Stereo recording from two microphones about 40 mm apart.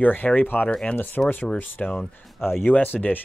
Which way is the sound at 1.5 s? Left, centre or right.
Left.